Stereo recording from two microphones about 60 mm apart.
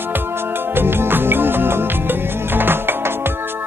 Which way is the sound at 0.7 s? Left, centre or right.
Right.